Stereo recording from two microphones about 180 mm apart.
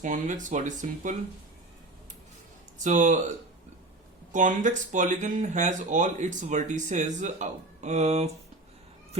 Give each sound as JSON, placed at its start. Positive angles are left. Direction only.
{"t": 0.0, "sound": "speech", "side_deg": -45}
{"t": 2.7, "sound": "speech", "side_deg": -45}
{"t": 4.3, "sound": "speech", "side_deg": -45}